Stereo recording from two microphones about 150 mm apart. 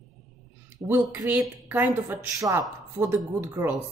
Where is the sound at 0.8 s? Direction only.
15° right (ahead or behind).